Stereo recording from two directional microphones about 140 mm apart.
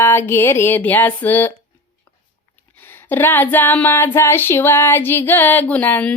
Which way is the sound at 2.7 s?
15° left (ahead or behind).